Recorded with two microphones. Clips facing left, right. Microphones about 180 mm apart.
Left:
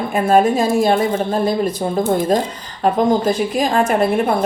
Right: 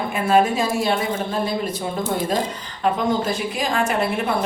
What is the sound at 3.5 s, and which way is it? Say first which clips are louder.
Speech: left 4 dB; 45° left (ahead or behind).